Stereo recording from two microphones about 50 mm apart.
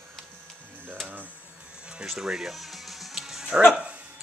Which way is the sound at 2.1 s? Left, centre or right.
Centre.